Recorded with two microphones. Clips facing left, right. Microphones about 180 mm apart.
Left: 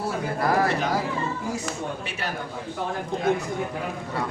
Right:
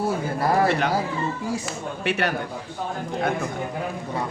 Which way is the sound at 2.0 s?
65° right (ahead or behind).